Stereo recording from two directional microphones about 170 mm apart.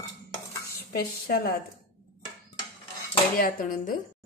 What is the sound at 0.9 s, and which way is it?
Speech, 65° left (ahead or behind).